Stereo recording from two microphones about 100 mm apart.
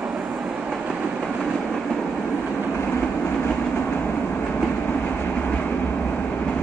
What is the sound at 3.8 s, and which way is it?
Train, 15° left (ahead or behind).